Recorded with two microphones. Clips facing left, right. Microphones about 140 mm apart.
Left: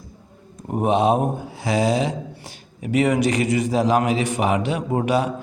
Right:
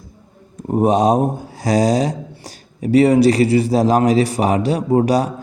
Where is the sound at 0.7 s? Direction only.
35° right (ahead or behind).